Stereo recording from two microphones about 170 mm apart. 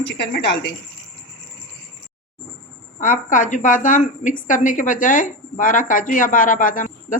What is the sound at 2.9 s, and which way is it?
Speech, 50° left (ahead or behind).